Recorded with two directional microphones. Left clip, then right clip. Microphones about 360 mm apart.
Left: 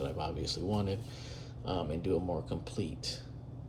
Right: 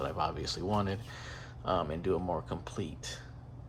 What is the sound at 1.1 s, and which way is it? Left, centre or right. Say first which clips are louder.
Speech: right 3 dB; centre.